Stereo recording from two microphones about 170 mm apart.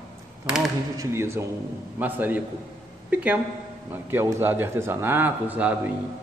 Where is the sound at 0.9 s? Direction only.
15° right (ahead or behind).